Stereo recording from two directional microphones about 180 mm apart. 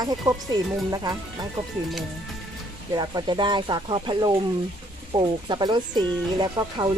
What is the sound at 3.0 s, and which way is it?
Speech, 25° right (ahead or behind).